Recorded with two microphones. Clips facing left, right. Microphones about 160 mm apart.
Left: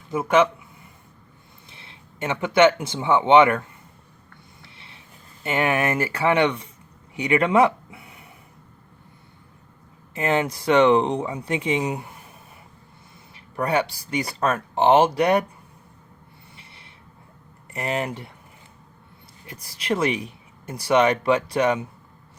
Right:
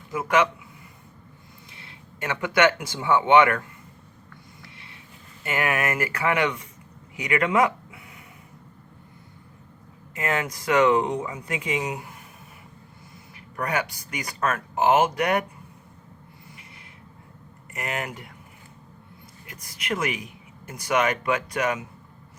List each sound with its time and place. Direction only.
0.1 s speech: 25° left (ahead or behind)
1.7 s speech: 25° left (ahead or behind)
4.6 s a sound: 25° left (ahead or behind)
5.4 s speech: 25° left (ahead or behind)
10.2 s speech: 30° left (ahead or behind)
13.6 s speech: 30° left (ahead or behind)
17.7 s speech: 30° left (ahead or behind)
19.5 s speech: 30° left (ahead or behind)